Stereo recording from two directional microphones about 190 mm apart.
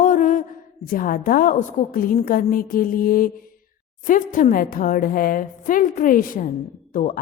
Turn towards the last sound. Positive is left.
turn(degrees=40)  # may be behind; listen again after turning